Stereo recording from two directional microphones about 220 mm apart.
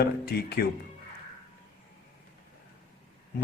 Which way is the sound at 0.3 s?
45° left (ahead or behind).